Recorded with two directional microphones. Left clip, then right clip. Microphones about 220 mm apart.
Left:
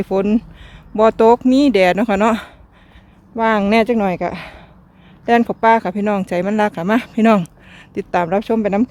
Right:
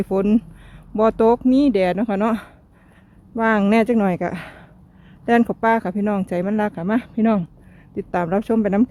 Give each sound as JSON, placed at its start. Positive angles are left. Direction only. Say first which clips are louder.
{"t": 0.0, "sound": "speech", "louder": "left 2 dB", "side_deg": 0}
{"t": 3.3, "sound": "speech", "louder": "left 3 dB", "side_deg": -5}
{"t": 8.1, "sound": "speech", "louder": "left 4 dB", "side_deg": 0}